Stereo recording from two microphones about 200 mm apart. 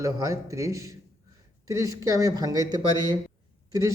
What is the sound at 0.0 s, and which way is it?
Speech, 15° right (ahead or behind).